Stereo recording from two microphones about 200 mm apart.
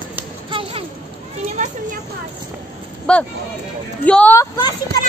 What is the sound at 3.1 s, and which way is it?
Speech, 5° left (ahead or behind).